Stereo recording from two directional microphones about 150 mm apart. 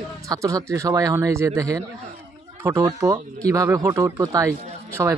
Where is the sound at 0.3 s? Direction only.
25° right (ahead or behind).